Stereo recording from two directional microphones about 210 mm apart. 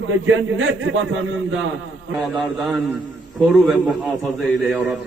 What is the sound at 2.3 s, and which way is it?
A man's voice, centre (ahead or behind).